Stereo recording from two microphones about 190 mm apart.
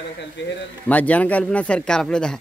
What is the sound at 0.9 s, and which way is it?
Speech, 10° left (ahead or behind).